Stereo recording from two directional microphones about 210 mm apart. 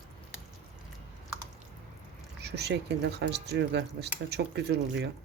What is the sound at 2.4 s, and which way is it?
Speech, 50° right (ahead or behind).